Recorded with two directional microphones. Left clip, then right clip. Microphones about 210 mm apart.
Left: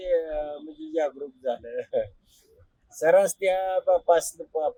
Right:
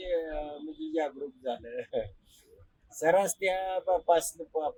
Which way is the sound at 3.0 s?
Centre (ahead or behind).